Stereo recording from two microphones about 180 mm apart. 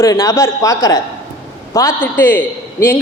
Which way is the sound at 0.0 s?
15° left (ahead or behind).